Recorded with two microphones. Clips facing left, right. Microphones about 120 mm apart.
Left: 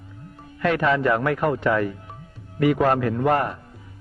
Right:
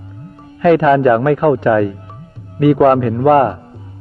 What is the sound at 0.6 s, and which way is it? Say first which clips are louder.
Speech: right 10 dB; 55° right (ahead or behind).